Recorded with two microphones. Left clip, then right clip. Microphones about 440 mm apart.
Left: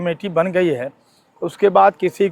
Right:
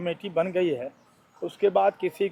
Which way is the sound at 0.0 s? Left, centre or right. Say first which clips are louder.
Left 8 dB; left.